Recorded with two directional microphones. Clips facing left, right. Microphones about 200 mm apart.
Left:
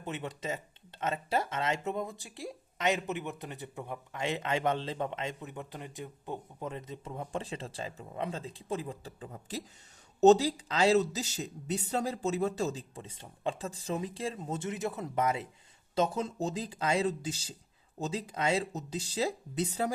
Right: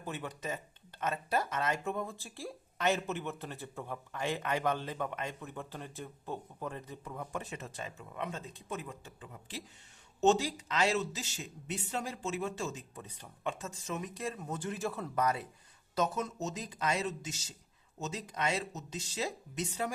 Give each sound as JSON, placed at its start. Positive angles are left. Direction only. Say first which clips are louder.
{"t": 0.0, "sound": "speech", "louder": "left 2 dB", "side_deg": 25}